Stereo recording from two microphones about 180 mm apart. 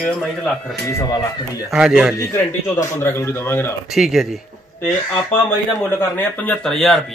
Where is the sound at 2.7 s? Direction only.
15° left (ahead or behind).